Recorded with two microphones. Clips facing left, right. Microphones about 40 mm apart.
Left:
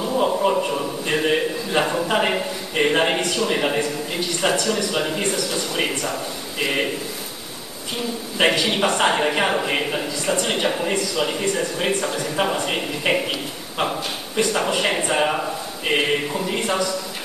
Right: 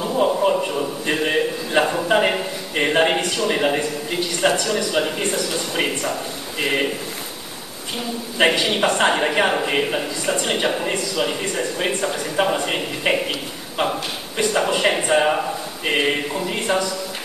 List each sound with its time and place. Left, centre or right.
0.0 s a sound: centre
3.4 s a man's voice: centre
8.4 s a man's voice: centre
14.5 s a man's voice: centre
14.9 s speech: centre